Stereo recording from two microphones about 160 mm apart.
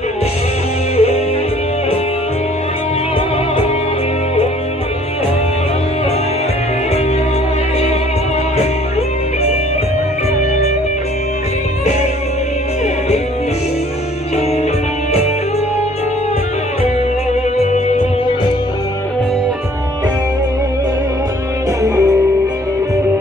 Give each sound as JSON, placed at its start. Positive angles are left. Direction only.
{"t": 0.9, "sound": "music", "side_deg": 40}
{"t": 16.8, "sound": "music", "side_deg": 40}
{"t": 21.8, "sound": "music", "side_deg": -20}